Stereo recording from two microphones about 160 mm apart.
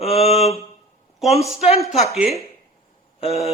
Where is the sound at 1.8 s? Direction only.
40° left (ahead or behind).